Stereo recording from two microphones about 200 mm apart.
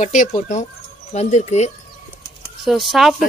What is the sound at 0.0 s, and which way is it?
Speech, 40° left (ahead or behind).